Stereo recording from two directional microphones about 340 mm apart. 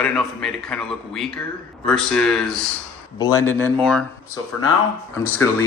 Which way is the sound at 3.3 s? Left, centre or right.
Left.